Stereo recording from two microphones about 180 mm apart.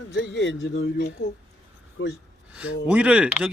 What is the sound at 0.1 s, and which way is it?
Speech, 75° left (ahead or behind).